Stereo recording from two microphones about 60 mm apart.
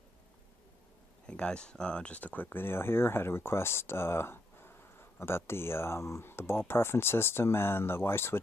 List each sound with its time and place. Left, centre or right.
1.2 s speech: centre; by 8.4 s left